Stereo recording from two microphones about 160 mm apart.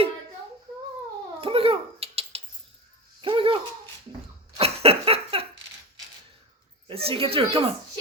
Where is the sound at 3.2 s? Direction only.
35° right (ahead or behind).